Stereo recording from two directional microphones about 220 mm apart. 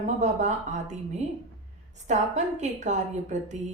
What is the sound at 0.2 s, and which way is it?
A woman's voice, 30° right (ahead or behind).